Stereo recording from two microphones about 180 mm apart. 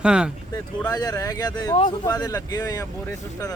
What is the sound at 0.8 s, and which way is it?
Speech, 20° left (ahead or behind).